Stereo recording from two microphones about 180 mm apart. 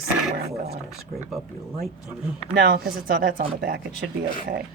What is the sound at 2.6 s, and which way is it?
Speech, 60° right (ahead or behind).